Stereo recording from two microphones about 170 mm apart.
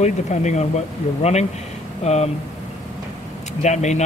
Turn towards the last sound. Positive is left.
turn(degrees=45)  # may be behind; listen again after turning